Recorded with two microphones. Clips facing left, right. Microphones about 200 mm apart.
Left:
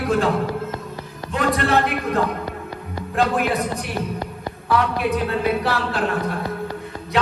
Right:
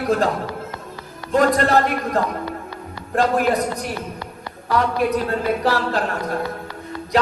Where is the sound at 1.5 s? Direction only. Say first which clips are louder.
Right 2 dB; 35° right (ahead or behind).